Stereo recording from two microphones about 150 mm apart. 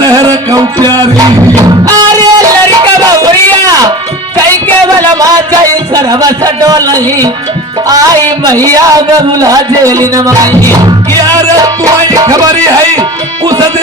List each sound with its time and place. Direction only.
0.0 s music: 25° right (ahead or behind)
3.0 s a sound: 25° right (ahead or behind)
5.2 s speech: 25° right (ahead or behind)
7.9 s music: 25° right (ahead or behind)